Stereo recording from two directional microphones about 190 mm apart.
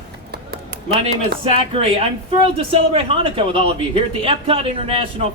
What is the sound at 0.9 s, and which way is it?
A man's voice, 30° right (ahead or behind).